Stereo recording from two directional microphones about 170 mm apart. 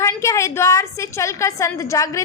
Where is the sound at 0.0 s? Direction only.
15° left (ahead or behind).